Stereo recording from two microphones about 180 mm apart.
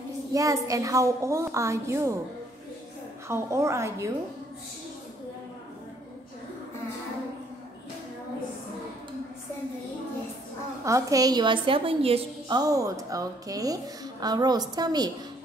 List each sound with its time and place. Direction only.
0.3 s a woman's voice: 20° right (ahead or behind)
3.3 s a woman's voice: 15° right (ahead or behind)
10.9 s a woman's voice: 20° right (ahead or behind)